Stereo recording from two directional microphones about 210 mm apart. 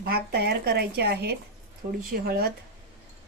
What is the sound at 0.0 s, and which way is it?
A woman's voice, 50° right (ahead or behind).